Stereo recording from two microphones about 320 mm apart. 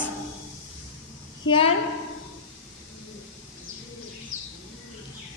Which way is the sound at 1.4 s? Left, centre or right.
Centre.